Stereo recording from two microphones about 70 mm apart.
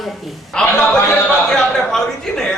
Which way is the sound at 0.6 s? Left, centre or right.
Centre.